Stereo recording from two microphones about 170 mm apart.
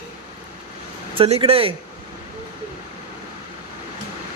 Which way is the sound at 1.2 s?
35° right (ahead or behind).